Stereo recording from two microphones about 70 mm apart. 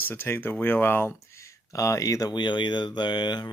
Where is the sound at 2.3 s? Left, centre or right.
Left.